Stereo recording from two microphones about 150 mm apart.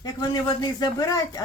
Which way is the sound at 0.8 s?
25° left (ahead or behind).